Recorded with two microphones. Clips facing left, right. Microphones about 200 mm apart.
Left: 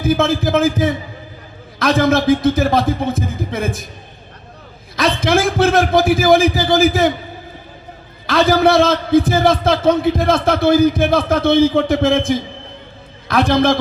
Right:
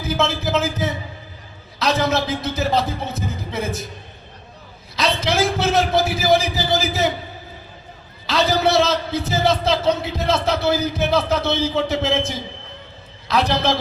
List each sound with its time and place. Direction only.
0.0 s a man's voice: 50° left (ahead or behind)
4.9 s a man's voice: 50° left (ahead or behind)
8.3 s a man's voice: 50° left (ahead or behind)